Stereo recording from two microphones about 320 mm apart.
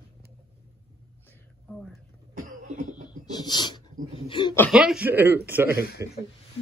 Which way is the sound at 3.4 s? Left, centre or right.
Centre.